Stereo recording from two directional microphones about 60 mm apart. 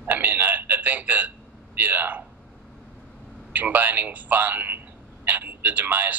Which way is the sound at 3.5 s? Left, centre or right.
Right.